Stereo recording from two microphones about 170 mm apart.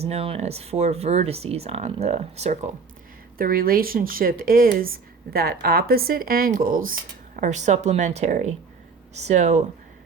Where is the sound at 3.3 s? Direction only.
60° right (ahead or behind).